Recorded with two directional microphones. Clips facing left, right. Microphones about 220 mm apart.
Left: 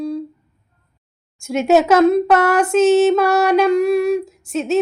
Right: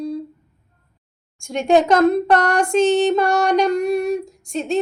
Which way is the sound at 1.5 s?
5° left (ahead or behind).